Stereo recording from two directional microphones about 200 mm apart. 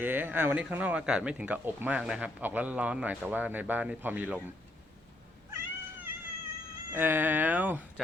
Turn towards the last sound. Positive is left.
turn(degrees=-10)  # may be behind; listen again after turning